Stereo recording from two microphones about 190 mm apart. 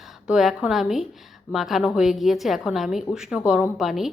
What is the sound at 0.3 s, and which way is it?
A woman's voice, 5° right (ahead or behind).